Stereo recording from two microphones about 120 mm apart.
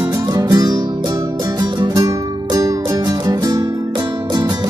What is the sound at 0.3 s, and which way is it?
Music, 30° right (ahead or behind).